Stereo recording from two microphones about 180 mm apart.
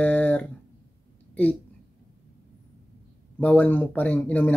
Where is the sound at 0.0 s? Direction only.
10° left (ahead or behind).